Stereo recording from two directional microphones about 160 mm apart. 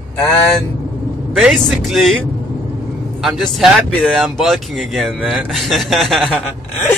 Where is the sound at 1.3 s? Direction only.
Centre (ahead or behind).